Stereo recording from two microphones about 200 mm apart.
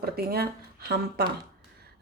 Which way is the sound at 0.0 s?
50° right (ahead or behind).